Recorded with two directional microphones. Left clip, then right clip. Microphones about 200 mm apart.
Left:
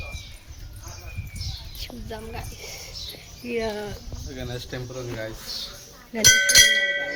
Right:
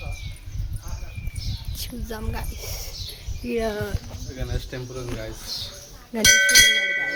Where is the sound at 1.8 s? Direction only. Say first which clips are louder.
Right 4 dB; 30° right (ahead or behind).